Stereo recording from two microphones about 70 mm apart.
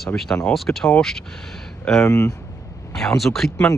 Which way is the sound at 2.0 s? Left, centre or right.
Left.